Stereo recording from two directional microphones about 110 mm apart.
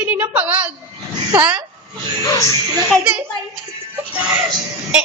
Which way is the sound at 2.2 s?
30° left (ahead or behind).